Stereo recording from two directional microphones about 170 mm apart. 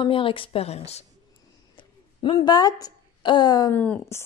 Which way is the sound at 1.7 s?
30° left (ahead or behind).